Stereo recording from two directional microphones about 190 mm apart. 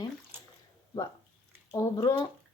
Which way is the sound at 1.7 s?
20° left (ahead or behind).